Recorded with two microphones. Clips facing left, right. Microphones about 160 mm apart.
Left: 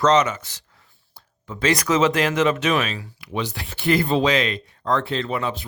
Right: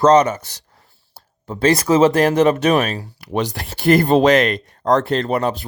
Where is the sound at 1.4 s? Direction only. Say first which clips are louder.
Right 5 dB; 35° right (ahead or behind).